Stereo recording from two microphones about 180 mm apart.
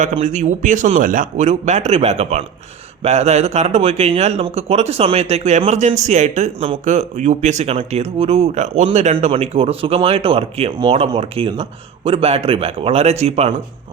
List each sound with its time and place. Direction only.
0.0 s speech: 45° right (ahead or behind)